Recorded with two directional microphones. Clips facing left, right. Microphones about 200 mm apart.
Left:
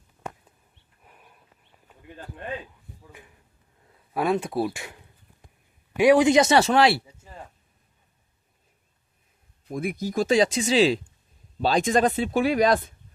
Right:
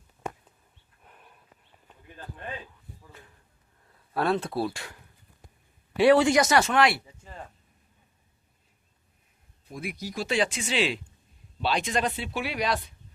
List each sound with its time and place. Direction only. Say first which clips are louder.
1.0 s dog: even; 5° left (ahead or behind)
4.1 s speech: left 2 dB; 15° left (ahead or behind); by 7.0 s 30° left (ahead or behind)
9.6 s speech: left 7 dB; 50° left (ahead or behind)